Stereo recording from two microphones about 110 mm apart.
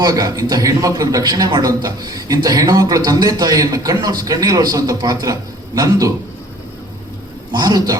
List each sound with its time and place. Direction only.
0.0 s a man's voice: 35° right (ahead or behind)
7.5 s a man's voice: 35° right (ahead or behind)